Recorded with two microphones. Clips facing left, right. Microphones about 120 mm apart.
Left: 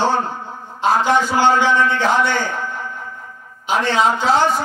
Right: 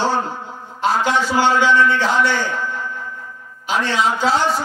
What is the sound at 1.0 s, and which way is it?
Speech, 50° left (ahead or behind).